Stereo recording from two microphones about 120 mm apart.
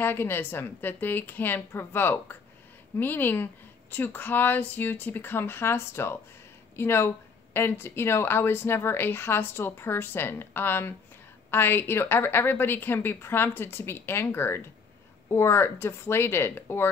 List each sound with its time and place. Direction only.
0.0 s a woman's voice: 20° left (ahead or behind)